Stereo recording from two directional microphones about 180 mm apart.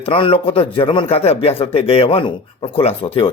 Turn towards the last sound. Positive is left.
turn(degrees=35)  # may be behind; listen again after turning